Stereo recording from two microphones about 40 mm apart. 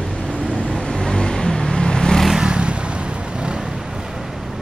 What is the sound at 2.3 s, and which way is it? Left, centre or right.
Vehicle, right.